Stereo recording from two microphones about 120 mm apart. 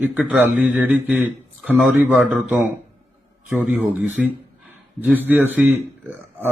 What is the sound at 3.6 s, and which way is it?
A man's voice, 15° right (ahead or behind).